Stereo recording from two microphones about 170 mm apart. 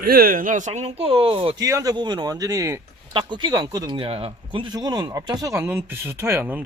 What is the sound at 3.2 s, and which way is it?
Speech, 25° right (ahead or behind).